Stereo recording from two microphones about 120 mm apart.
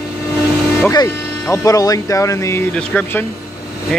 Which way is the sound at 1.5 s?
30° left (ahead or behind).